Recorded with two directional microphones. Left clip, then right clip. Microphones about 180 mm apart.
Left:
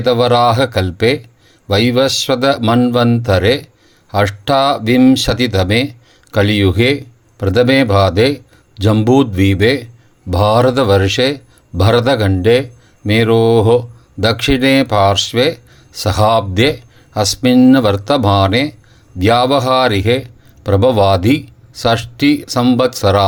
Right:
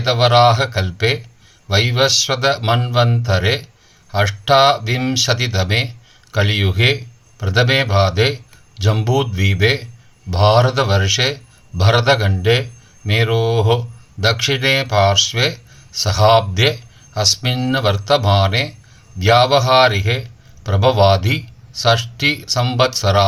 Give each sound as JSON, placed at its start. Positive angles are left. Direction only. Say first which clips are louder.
{"t": 0.0, "sound": "a man's voice", "louder": "left 1 dB", "side_deg": 45}